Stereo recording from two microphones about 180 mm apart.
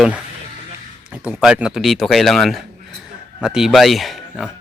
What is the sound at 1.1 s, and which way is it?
Speech, 5° right (ahead or behind).